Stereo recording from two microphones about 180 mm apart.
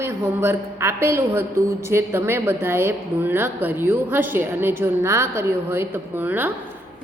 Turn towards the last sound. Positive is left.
turn(degrees=-10)  # may be behind; listen again after turning